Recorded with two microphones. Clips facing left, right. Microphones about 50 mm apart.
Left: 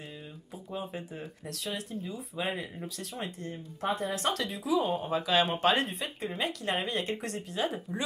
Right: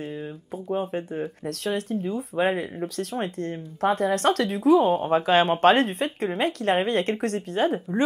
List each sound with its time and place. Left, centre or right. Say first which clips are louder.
0.7 s speech: right 10 dB; right